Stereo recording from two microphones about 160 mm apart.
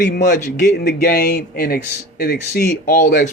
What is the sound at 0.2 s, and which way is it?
Speech, 50° left (ahead or behind).